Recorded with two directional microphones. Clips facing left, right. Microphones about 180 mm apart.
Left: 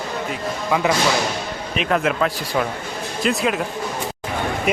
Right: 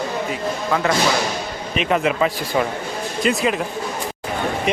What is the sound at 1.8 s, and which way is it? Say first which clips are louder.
A man's voice: right 1 dB; centre (ahead or behind).